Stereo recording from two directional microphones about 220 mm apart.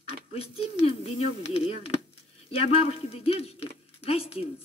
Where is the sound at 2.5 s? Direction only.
25° left (ahead or behind).